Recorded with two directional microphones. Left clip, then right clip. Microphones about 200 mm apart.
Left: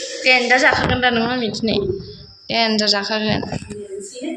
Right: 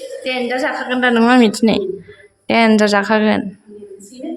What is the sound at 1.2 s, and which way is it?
Speech, 65° right (ahead or behind).